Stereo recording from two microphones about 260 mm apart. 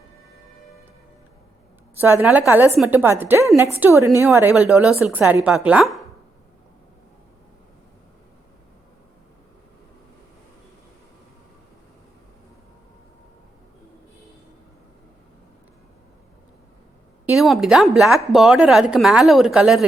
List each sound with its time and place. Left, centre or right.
2.0 s a woman's voice: centre
17.2 s speech: centre